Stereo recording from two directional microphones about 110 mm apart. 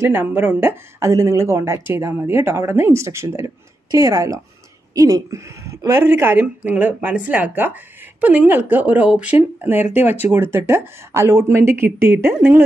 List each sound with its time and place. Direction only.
0.1 s a woman's voice: 20° right (ahead or behind)